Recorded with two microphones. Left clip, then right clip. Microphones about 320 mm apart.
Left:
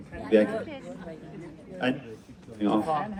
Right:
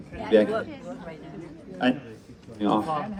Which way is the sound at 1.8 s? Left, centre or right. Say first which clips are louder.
Right 4 dB; right.